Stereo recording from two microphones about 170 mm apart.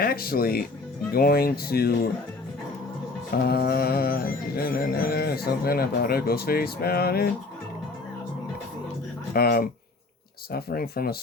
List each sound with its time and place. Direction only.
0.0 s speech: 60° left (ahead or behind)
1.1 s music: 60° left (ahead or behind)
3.4 s music: 65° left (ahead or behind)
9.3 s music: 60° left (ahead or behind)